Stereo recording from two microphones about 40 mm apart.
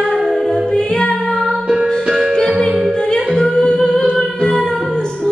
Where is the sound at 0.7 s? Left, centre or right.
Left.